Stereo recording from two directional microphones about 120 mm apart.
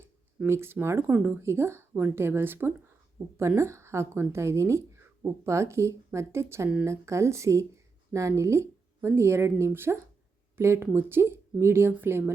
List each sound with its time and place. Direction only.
0.4 s speech: 20° right (ahead or behind)